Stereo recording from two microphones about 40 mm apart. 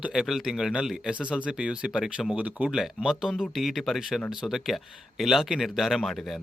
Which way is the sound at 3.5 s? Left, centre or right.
Centre.